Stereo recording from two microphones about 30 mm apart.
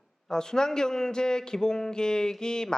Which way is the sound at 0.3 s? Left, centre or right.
Left.